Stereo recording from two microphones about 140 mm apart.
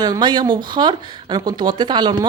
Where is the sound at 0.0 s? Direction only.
30° right (ahead or behind).